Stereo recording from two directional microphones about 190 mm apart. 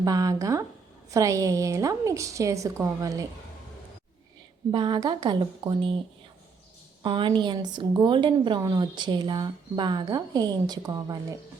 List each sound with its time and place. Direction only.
0.0 s a woman's voice: 20° right (ahead or behind)
4.7 s a woman's voice: 25° right (ahead or behind)
7.0 s a woman's voice: 25° right (ahead or behind)